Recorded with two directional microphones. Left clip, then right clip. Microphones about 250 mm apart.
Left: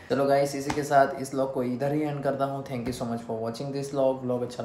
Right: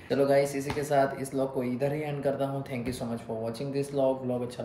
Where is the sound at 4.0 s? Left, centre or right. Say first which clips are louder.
Left 2 dB; centre.